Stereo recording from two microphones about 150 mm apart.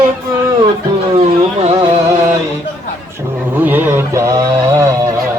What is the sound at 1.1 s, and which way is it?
Music, 45° right (ahead or behind).